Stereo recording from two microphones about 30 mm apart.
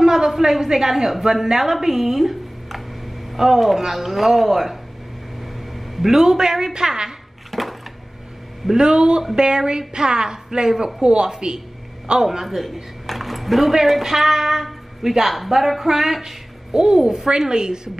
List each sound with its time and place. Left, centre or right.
0.0 s a woman's voice: centre
5.4 s a sound: centre
6.0 s a woman's voice: centre
7.5 s a sound: centre
8.7 s a woman's voice: right
11.2 s a woman's voice: right
12.4 s speech: centre
16.7 s a woman's voice: right